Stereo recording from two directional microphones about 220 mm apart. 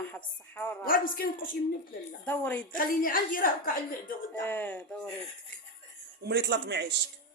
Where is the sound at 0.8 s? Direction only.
40° left (ahead or behind).